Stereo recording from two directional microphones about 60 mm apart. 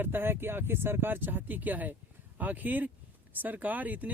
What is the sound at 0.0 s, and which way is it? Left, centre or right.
Speech, right.